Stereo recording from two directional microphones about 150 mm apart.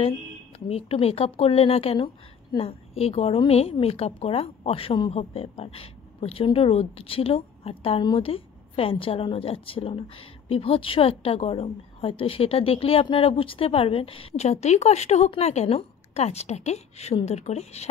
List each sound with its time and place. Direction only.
0.7 s a woman's voice: 40° left (ahead or behind)